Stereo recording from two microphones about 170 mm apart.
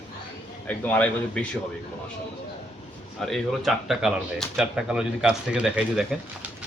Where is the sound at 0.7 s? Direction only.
10° left (ahead or behind).